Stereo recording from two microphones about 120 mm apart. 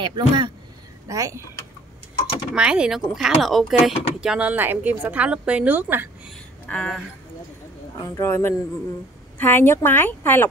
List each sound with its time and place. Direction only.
0.0 s speech: 40° right (ahead or behind)
1.0 s speech: 30° right (ahead or behind)
2.5 s a woman's voice: 10° right (ahead or behind)
6.7 s speech: 10° left (ahead or behind)
8.0 s speech: 25° left (ahead or behind)